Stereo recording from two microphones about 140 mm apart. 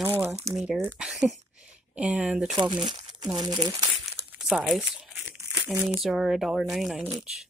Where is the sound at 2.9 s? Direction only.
35° right (ahead or behind).